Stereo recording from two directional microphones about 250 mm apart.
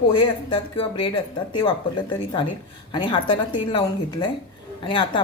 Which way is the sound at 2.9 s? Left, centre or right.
Centre.